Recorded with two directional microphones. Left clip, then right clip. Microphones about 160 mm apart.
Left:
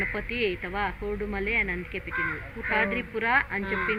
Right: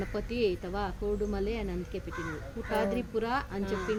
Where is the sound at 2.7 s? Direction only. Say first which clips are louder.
Left 3 dB; 25° right (ahead or behind).